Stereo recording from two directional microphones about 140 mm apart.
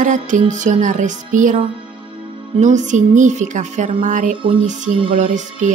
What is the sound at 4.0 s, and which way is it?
Speech, 70° right (ahead or behind).